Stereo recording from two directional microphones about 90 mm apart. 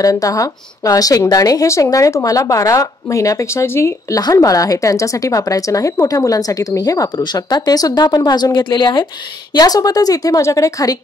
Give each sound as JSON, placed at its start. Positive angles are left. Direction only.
{"t": 0.0, "sound": "speech", "side_deg": 40}
{"t": 4.2, "sound": "speech", "side_deg": 45}
{"t": 9.5, "sound": "a woman's voice", "side_deg": 45}